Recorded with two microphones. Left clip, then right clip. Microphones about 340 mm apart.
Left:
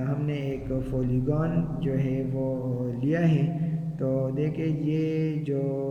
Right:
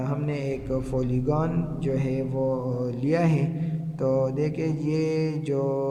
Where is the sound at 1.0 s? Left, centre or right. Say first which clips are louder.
Right 2 dB; centre.